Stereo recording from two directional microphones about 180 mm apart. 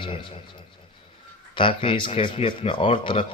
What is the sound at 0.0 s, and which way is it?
Speech, 30° left (ahead or behind).